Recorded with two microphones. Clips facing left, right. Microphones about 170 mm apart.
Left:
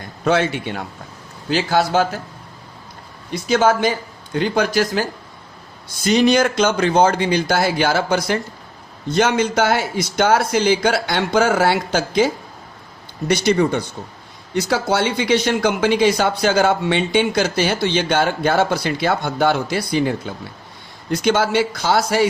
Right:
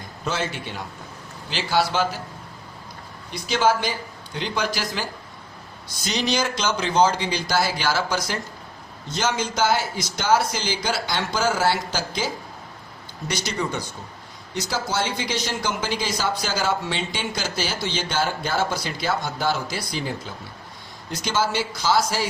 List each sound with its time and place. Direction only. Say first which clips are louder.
0.3 s speech: left 10 dB; 65° left (ahead or behind)
1.5 s a man's voice: left 5 dB; 45° left (ahead or behind)
3.5 s a man's voice: left 5 dB; 50° left (ahead or behind)